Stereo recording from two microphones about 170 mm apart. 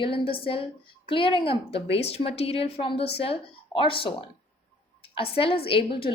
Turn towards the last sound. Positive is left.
turn(degrees=30)  # may be behind; listen again after turning